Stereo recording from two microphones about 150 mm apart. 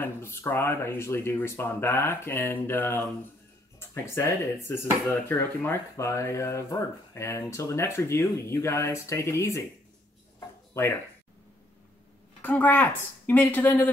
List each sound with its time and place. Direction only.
0.0 s speech: 15° left (ahead or behind)
10.7 s speech: 15° left (ahead or behind)
12.4 s speech: 10° left (ahead or behind)